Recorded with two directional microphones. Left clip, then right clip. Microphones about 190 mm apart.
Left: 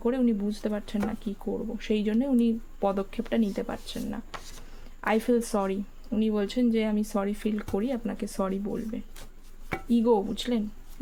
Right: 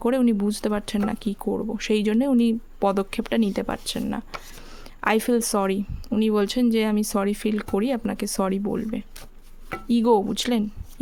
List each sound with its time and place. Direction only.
0.0 s speech: 45° right (ahead or behind)